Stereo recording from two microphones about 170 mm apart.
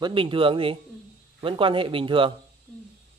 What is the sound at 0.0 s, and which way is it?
Speech, 30° right (ahead or behind).